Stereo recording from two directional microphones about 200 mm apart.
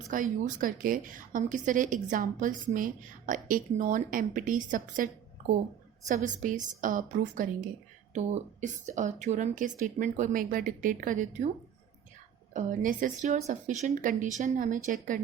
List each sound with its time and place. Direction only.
0.1 s a woman's voice: 40° right (ahead or behind)
6.1 s a woman's voice: 40° right (ahead or behind)
12.5 s a woman's voice: 40° right (ahead or behind)